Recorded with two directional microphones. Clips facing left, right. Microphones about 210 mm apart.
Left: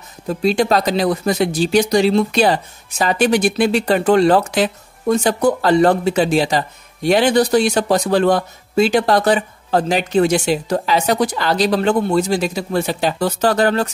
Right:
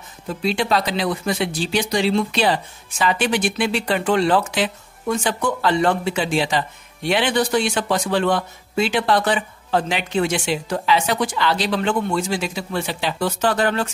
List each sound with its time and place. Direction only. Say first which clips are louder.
0.3 s speech: left 5 dB; 40° left (ahead or behind)